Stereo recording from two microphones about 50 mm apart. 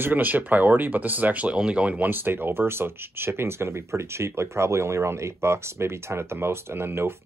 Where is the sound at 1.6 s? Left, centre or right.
Right.